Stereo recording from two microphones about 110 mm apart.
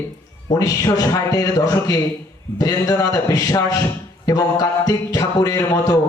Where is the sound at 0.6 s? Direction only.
35° left (ahead or behind).